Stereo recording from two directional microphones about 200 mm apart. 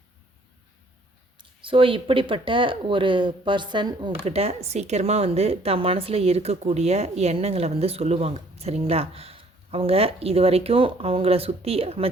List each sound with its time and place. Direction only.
1.4 s a woman's voice: 25° right (ahead or behind)